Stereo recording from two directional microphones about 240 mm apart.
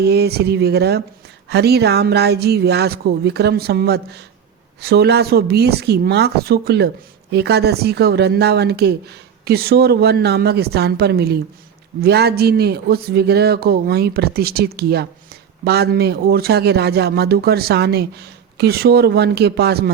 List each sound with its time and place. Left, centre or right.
0.0 s a man's voice: right